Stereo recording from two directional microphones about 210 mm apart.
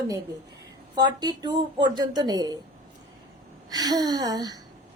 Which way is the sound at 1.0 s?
20° right (ahead or behind).